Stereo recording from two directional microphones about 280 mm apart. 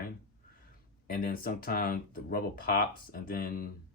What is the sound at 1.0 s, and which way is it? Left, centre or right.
Speech, left.